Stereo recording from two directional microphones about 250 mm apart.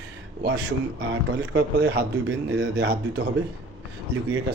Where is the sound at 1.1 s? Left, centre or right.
Right.